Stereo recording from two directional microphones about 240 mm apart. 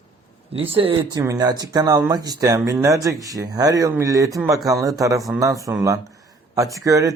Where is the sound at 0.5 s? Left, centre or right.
Right.